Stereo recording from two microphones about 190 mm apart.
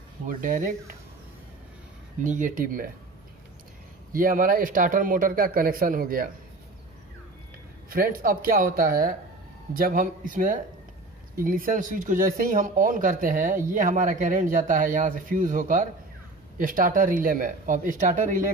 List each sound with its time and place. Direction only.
0.3 s speech: 45° right (ahead or behind)
2.2 s speech: 45° right (ahead or behind)
4.1 s speech: 45° right (ahead or behind)
7.9 s speech: 50° right (ahead or behind)